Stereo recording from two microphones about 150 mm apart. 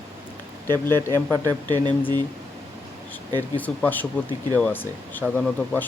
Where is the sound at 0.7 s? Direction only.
25° right (ahead or behind).